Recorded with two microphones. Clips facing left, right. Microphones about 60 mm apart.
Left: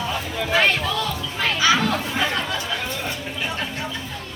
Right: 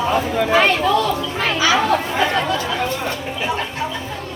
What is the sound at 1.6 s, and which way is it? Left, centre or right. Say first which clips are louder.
Speech: right 3 dB; centre.